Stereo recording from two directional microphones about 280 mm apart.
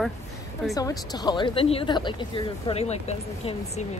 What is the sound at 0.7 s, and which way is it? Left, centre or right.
Speech, centre.